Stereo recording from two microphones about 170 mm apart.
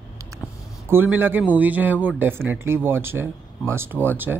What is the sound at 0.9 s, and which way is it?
Speech, 10° right (ahead or behind).